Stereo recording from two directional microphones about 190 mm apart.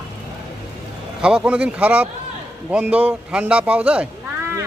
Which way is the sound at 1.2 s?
5° right (ahead or behind).